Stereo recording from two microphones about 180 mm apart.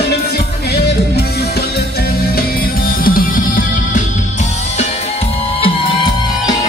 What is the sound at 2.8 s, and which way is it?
Music, 55° left (ahead or behind).